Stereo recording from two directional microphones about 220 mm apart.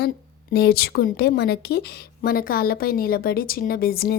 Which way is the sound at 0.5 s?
45° left (ahead or behind).